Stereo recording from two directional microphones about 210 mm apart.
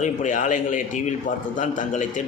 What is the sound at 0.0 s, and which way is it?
Speech, 35° left (ahead or behind).